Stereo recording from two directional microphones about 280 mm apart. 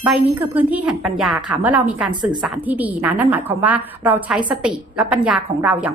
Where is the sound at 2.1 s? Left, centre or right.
Centre.